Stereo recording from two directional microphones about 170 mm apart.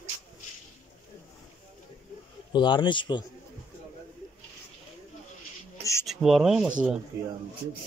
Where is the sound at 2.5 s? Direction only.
25° left (ahead or behind).